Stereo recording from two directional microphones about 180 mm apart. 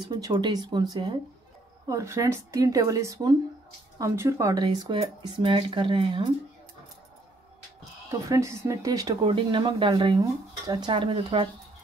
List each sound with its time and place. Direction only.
0.1 s speech: 25° right (ahead or behind)
8.1 s speech: 15° right (ahead or behind)